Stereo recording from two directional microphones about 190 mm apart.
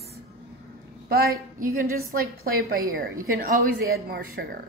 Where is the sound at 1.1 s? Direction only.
50° right (ahead or behind).